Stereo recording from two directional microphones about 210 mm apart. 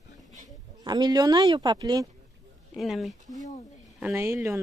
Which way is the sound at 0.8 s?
20° right (ahead or behind).